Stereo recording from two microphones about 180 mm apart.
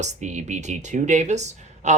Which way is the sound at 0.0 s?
40° right (ahead or behind).